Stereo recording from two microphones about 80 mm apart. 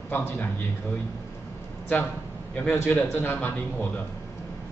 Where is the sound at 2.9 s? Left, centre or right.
Centre.